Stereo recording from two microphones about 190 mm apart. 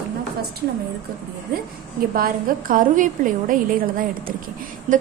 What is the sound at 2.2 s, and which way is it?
A woman's voice, 45° right (ahead or behind).